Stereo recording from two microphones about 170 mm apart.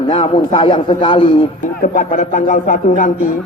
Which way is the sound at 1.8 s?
50° left (ahead or behind).